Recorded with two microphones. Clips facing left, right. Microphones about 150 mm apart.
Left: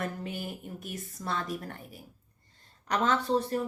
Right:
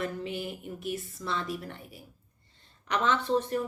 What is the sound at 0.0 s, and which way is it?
A woman's voice, 45° left (ahead or behind).